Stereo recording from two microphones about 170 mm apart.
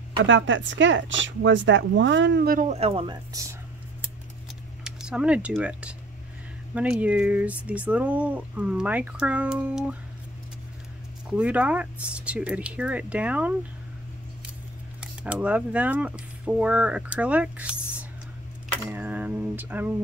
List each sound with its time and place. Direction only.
0.2 s speech: 90° right
2.5 s speech: 45° right (ahead or behind)
4.8 s speech: 5° right (ahead or behind)
11.2 s speech: 5° right (ahead or behind)
15.4 s speech: 10° right (ahead or behind)
18.9 s a sound: 10° right (ahead or behind)